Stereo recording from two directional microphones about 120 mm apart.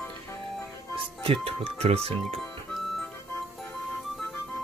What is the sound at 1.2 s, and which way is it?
Speech, 50° right (ahead or behind).